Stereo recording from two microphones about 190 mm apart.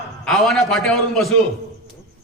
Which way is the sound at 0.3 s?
5° left (ahead or behind).